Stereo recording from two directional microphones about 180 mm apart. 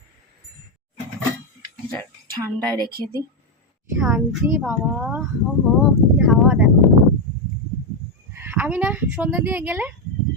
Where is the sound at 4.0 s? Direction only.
10° right (ahead or behind).